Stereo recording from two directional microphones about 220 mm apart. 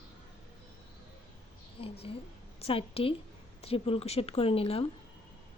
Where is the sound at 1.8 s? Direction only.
25° left (ahead or behind).